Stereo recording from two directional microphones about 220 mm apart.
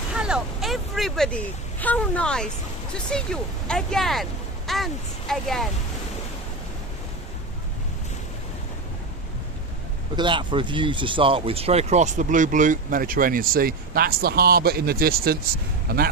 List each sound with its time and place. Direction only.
0.1 s speech: 5° right (ahead or behind)
10.2 s speech: 20° right (ahead or behind); by 15.4 s 45° right (ahead or behind)